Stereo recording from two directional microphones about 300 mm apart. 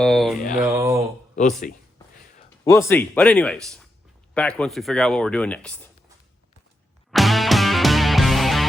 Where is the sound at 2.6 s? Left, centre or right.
Centre.